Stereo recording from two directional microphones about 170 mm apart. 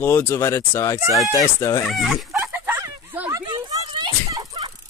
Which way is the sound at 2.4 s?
10° right (ahead or behind).